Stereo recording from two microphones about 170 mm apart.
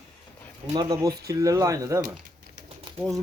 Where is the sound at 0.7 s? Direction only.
20° right (ahead or behind).